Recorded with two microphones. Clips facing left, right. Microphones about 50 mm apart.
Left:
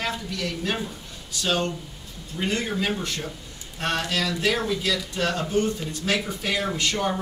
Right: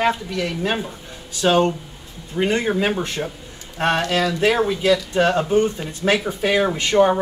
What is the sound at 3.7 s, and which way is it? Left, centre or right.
Speech, right.